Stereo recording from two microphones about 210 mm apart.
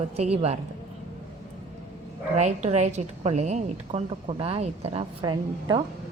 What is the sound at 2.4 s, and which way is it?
A woman's voice, 35° right (ahead or behind).